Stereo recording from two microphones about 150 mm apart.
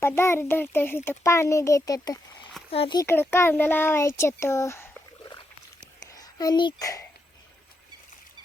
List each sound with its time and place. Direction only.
0.0 s a child's voice: 15° left (ahead or behind)
2.6 s speech: 40° left (ahead or behind)
3.0 s a child's voice: 15° left (ahead or behind)